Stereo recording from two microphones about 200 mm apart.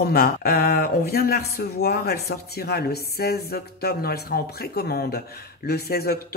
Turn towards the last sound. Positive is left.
turn(degrees=50)  # may be behind; listen again after turning